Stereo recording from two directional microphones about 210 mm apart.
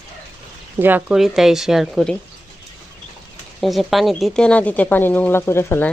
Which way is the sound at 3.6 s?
Centre (ahead or behind).